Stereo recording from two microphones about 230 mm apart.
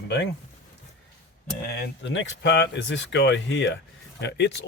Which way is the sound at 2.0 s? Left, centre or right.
Left.